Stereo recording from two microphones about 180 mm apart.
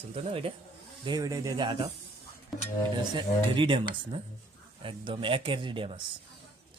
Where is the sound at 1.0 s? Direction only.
20° right (ahead or behind).